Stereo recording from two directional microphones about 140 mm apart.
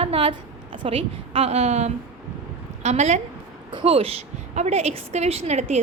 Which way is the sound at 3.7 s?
40° right (ahead or behind).